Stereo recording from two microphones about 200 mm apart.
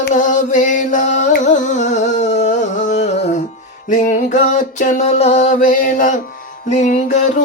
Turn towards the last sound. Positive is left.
turn(degrees=40)  # may be behind; listen again after turning